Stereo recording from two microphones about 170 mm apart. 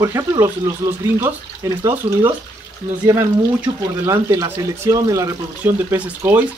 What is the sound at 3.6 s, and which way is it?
Speech, 15° right (ahead or behind).